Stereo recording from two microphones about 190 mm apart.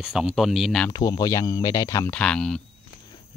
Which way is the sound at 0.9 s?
20° left (ahead or behind).